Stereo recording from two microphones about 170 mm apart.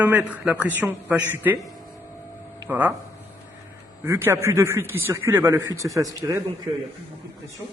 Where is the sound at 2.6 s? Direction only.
10° right (ahead or behind).